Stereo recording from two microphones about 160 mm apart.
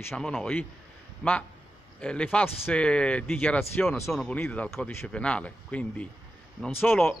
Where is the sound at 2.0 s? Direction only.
5° left (ahead or behind).